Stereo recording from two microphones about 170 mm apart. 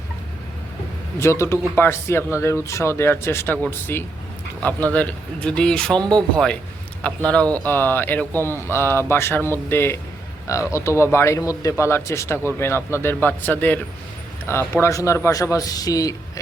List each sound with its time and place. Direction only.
1.2 s a man's voice: 15° left (ahead or behind)
6.0 s speech: 25° right (ahead or behind)
6.3 s a man's voice: 5° left (ahead or behind)
8.3 s a man's voice: 15° right (ahead or behind)
8.6 s a man's voice: 15° left (ahead or behind)